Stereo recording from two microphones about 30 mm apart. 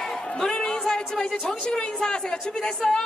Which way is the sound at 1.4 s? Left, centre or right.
Left.